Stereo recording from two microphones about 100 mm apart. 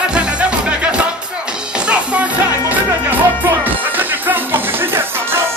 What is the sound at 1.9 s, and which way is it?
Music, 15° right (ahead or behind).